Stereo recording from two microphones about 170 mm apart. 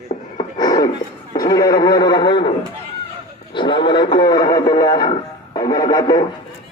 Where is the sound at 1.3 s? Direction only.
20° left (ahead or behind).